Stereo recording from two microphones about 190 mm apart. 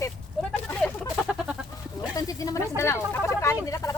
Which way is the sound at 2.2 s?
20° left (ahead or behind).